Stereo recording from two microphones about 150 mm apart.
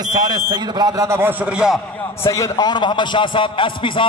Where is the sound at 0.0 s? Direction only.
25° right (ahead or behind).